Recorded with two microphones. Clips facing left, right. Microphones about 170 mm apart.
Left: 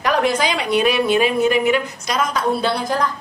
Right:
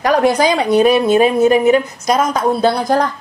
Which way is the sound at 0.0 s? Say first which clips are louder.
Right 5 dB; 40° right (ahead or behind).